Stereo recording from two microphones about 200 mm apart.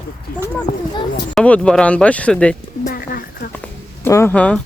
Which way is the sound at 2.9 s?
45° left (ahead or behind).